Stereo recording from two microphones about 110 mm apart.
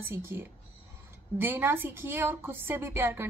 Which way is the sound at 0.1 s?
20° right (ahead or behind).